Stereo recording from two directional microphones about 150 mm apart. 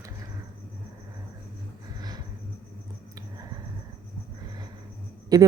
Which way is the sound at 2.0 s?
25° right (ahead or behind).